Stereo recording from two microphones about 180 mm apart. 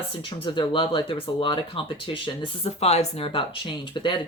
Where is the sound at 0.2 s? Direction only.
30° left (ahead or behind).